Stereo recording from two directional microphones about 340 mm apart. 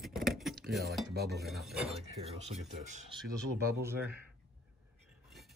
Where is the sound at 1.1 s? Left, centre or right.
Right.